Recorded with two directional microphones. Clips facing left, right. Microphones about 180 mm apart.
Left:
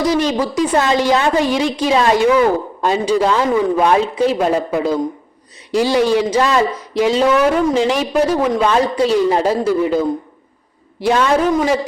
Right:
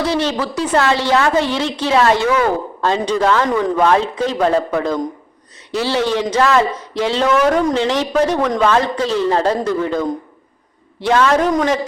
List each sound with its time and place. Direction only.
0.0 s a woman's voice: 10° left (ahead or behind)